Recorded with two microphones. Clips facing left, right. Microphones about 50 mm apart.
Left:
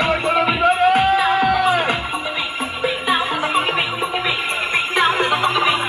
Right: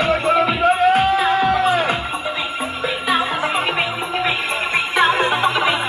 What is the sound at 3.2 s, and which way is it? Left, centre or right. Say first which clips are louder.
Music: even; centre.